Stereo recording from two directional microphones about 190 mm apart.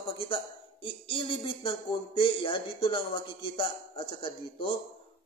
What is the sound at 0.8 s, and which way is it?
Speech, 25° left (ahead or behind).